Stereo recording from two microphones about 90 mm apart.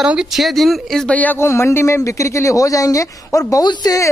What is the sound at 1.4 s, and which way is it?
A man's voice, 30° left (ahead or behind).